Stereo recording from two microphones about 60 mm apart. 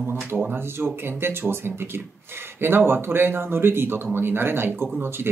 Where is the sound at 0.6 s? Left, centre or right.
Right.